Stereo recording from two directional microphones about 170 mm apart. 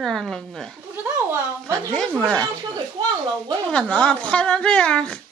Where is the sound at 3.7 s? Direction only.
5° left (ahead or behind).